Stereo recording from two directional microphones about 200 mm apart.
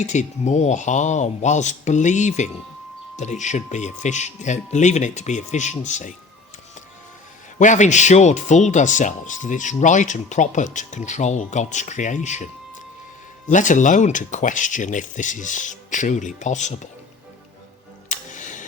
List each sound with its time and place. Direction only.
0.0 s speech: 35° left (ahead or behind)
7.6 s speech: 35° left (ahead or behind)
13.5 s speech: 40° left (ahead or behind)
18.1 s a sound: 40° left (ahead or behind)